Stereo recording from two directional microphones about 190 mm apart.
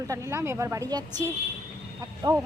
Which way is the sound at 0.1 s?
15° right (ahead or behind).